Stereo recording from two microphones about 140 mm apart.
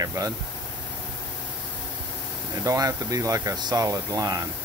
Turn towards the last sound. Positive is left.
turn(degrees=-25)  # may be behind; listen again after turning